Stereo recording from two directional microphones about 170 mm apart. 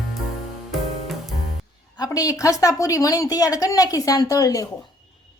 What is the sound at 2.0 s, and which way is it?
A woman's voice, 20° left (ahead or behind).